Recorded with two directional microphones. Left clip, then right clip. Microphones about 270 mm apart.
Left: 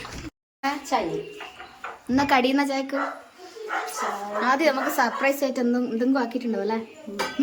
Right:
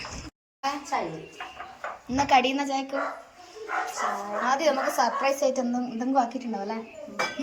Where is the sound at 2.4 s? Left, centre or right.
Centre.